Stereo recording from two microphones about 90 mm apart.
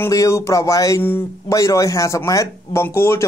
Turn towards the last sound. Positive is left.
turn(degrees=25)  # may be behind; listen again after turning